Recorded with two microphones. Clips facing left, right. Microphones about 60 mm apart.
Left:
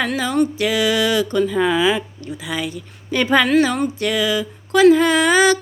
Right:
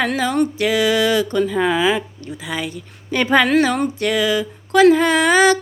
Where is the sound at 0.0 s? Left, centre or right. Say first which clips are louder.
Right 1 dB; right.